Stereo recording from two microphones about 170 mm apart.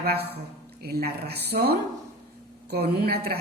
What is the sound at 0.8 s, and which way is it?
A woman's voice, 65° right (ahead or behind).